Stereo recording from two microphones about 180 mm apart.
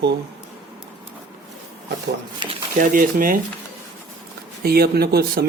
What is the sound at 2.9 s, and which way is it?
Speech, 50° right (ahead or behind).